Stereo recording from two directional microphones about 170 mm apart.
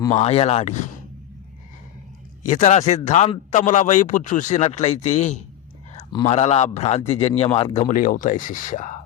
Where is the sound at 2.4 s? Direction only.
45° left (ahead or behind).